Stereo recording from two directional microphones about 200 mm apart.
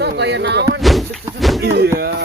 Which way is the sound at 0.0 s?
60° right (ahead or behind).